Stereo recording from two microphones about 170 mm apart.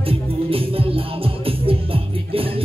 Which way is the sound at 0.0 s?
35° right (ahead or behind).